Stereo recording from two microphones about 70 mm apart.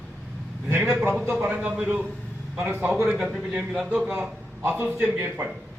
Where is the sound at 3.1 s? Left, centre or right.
Centre.